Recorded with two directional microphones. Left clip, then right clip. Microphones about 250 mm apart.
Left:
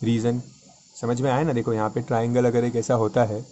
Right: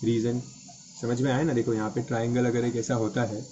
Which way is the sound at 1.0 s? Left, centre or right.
Left.